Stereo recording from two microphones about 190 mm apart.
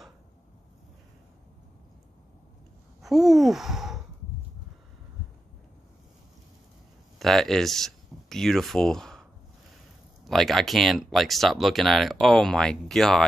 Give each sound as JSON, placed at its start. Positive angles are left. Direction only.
{"t": 3.0, "sound": "speech", "side_deg": 0}
{"t": 7.2, "sound": "speech", "side_deg": 0}
{"t": 10.2, "sound": "speech", "side_deg": 0}